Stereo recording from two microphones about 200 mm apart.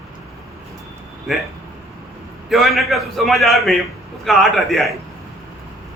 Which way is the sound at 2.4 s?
Centre (ahead or behind).